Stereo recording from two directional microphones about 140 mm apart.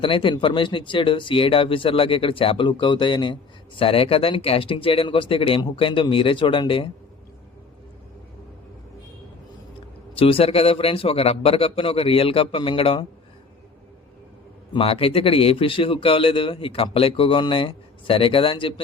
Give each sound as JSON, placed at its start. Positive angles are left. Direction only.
{"t": 0.0, "sound": "speech", "side_deg": 35}
{"t": 10.2, "sound": "speech", "side_deg": 40}
{"t": 14.7, "sound": "speech", "side_deg": 40}